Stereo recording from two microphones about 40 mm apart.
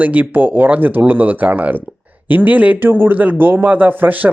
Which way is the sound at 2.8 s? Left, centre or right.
Right.